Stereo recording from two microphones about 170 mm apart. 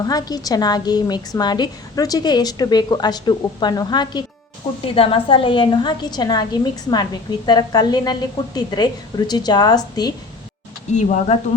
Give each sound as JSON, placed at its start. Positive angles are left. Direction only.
{"t": 0.0, "sound": "a woman's voice", "side_deg": 20}
{"t": 10.9, "sound": "speech", "side_deg": 45}